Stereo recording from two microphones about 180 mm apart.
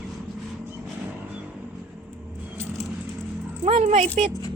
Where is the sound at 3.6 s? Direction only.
35° right (ahead or behind).